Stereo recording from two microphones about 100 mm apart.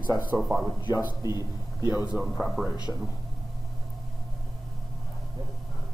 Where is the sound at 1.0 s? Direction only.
40° left (ahead or behind).